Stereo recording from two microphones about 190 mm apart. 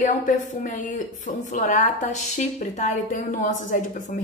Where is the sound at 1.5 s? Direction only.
40° left (ahead or behind).